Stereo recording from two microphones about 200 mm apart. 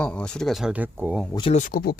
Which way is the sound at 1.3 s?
25° left (ahead or behind).